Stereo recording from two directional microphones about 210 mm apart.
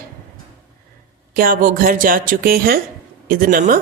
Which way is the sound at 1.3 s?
45° right (ahead or behind).